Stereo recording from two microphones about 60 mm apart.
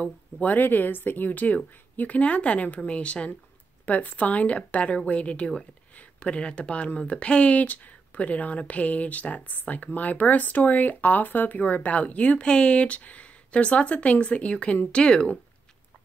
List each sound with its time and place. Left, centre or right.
0.0 s speech: left